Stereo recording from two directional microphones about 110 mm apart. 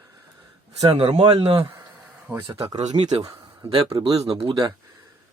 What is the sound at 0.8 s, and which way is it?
Speech, 65° right (ahead or behind).